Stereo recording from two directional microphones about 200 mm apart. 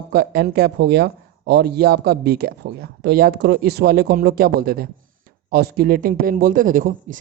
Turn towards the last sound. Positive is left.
turn(degrees=-40)  # may be behind; listen again after turning